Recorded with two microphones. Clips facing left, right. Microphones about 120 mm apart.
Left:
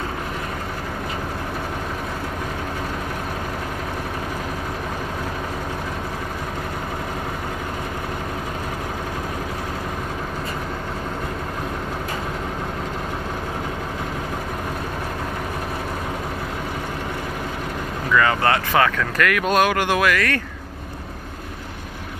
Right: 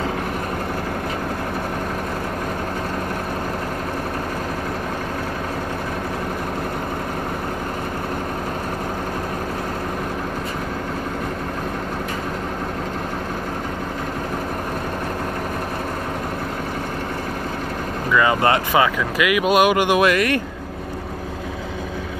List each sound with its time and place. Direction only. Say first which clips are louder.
18.1 s speech: right 1 dB; 15° right (ahead or behind)